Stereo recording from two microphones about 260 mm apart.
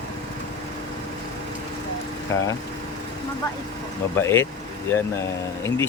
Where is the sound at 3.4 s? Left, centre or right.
Centre.